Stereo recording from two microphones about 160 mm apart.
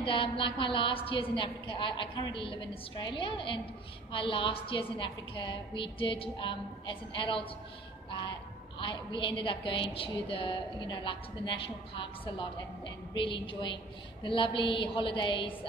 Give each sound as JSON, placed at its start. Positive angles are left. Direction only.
{"t": 0.0, "sound": "a woman's voice", "side_deg": 30}